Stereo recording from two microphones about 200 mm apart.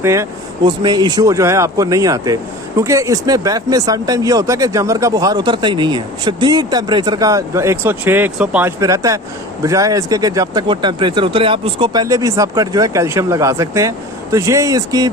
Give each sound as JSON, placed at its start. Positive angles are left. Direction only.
{"t": 0.0, "sound": "speech", "side_deg": -15}